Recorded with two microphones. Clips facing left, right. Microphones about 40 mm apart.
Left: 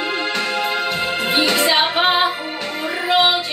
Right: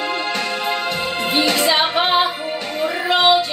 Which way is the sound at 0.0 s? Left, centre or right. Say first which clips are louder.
Even; centre.